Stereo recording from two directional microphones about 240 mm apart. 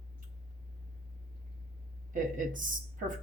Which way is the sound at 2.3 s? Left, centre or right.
Right.